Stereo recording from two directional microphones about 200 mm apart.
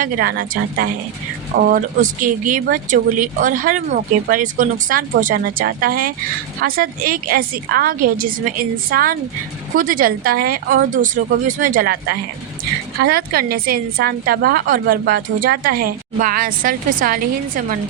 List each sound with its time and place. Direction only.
0.0 s a woman's voice: 45° right (ahead or behind)
13.0 s a woman's voice: 50° right (ahead or behind)